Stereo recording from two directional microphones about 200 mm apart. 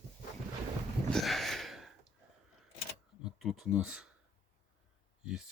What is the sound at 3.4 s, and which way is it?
Speech, centre (ahead or behind).